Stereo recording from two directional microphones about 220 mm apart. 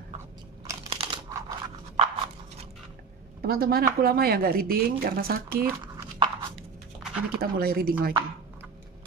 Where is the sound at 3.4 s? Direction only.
45° right (ahead or behind).